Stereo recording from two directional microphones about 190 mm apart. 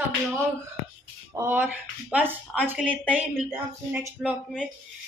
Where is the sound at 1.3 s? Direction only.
10° right (ahead or behind).